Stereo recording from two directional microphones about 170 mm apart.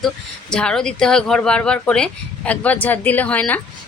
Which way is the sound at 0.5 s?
5° left (ahead or behind).